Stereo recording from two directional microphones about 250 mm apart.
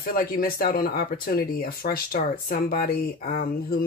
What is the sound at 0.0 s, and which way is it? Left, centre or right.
Speech, left.